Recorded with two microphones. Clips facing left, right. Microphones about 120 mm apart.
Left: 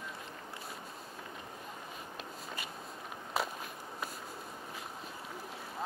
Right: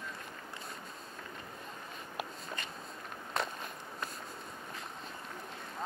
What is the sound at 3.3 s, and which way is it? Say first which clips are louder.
Walk: left 1 dB; 5° left (ahead or behind).